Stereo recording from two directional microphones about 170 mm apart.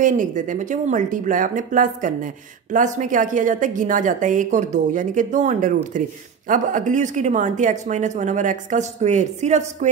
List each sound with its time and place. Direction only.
0.0 s speech: 50° right (ahead or behind)